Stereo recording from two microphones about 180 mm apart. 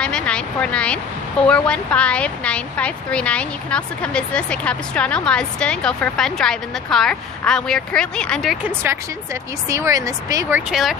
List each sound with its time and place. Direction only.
0.0 s a woman's voice: 5° left (ahead or behind)
8.6 s speech: 15° right (ahead or behind)
10.7 s a woman's voice: centre (ahead or behind)